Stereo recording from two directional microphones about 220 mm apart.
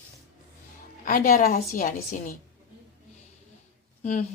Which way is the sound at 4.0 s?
30° left (ahead or behind).